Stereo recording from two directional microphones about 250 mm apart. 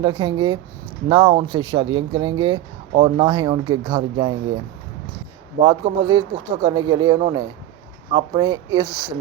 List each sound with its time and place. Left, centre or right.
0.0 s speech: centre
5.6 s speech: centre